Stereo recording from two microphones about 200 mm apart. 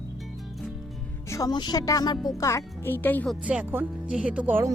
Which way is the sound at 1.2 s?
15° left (ahead or behind).